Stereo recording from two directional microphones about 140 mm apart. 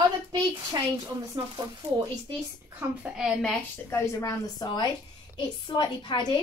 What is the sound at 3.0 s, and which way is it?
Speech, 5° right (ahead or behind).